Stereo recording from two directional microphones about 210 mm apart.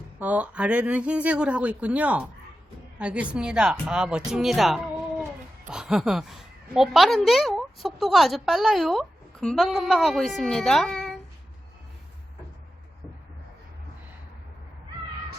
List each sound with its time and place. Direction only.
0.2 s a woman's voice: 5° right (ahead or behind)